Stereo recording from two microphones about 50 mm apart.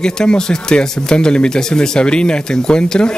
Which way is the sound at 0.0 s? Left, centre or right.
Centre.